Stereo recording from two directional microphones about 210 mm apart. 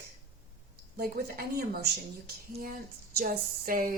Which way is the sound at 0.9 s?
45° right (ahead or behind).